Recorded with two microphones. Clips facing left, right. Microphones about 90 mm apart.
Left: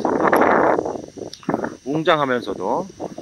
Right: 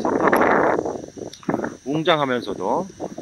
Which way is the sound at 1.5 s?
35° left (ahead or behind).